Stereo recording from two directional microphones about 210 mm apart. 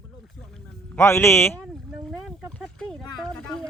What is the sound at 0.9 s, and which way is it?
Speech, 10° left (ahead or behind).